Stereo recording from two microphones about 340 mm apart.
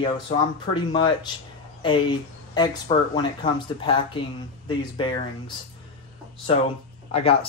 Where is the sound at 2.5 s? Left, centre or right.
Centre.